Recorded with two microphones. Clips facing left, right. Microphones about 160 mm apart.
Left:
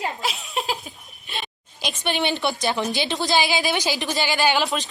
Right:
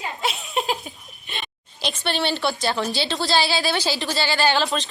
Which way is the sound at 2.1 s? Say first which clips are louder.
Even; 15° left (ahead or behind).